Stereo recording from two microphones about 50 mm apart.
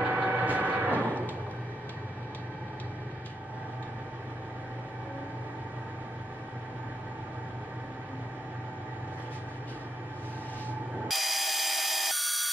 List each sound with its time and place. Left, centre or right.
0.0 s vehicle: right
11.1 s tools: centre